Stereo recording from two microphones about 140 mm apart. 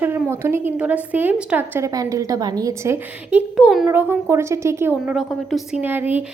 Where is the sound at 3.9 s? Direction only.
15° right (ahead or behind).